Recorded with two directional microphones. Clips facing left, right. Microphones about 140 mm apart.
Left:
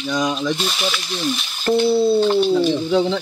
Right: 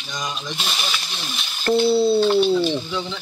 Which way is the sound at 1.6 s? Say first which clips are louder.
Left 1 dB; 20° left (ahead or behind).